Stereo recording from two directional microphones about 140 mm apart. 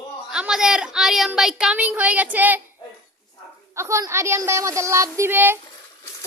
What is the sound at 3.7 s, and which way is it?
A woman's voice, 20° right (ahead or behind).